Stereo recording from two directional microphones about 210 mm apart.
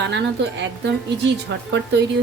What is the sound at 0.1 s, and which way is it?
Speech, 55° right (ahead or behind).